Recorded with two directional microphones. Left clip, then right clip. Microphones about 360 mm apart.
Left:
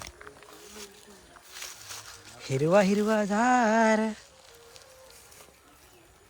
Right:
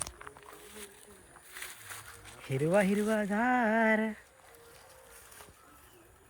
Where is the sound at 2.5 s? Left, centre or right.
Centre.